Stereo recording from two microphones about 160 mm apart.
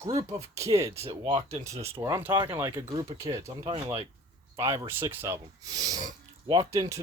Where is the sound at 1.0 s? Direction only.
35° right (ahead or behind).